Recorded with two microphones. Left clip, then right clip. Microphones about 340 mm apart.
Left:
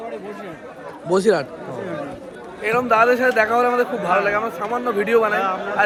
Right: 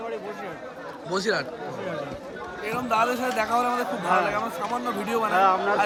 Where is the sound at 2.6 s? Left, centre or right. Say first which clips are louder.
Left 8 dB; centre.